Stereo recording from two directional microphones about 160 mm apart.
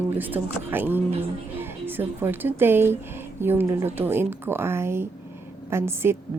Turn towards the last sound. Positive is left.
turn(degrees=-15)  # may be behind; listen again after turning